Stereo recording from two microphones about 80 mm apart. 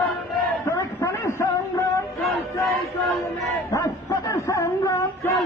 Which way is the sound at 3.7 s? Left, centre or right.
Left.